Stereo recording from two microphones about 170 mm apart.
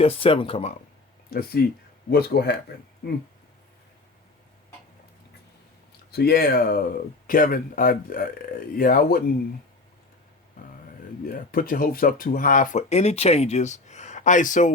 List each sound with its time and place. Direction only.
0.0 s speech: 35° left (ahead or behind)
1.3 s speech: 60° left (ahead or behind)
6.1 s speech: 70° left (ahead or behind)
11.2 s speech: 55° left (ahead or behind)